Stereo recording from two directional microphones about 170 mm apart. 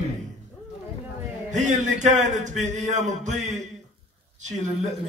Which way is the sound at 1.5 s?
45° right (ahead or behind).